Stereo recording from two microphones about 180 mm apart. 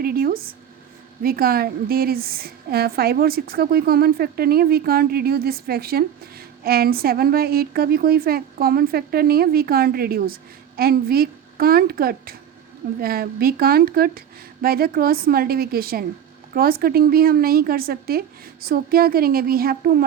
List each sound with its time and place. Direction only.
0.0 s a woman's voice: 55° right (ahead or behind)